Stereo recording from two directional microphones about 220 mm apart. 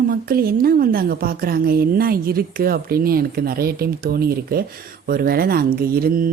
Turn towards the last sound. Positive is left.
turn(degrees=-40)  # may be behind; listen again after turning